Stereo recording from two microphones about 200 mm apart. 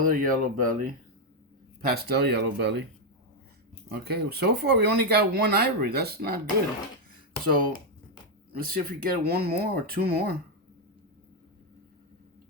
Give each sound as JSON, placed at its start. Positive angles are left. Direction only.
{"t": 0.0, "sound": "speech", "side_deg": -45}
{"t": 3.8, "sound": "speech", "side_deg": -50}
{"t": 7.1, "sound": "a sound", "side_deg": -45}
{"t": 8.5, "sound": "speech", "side_deg": -45}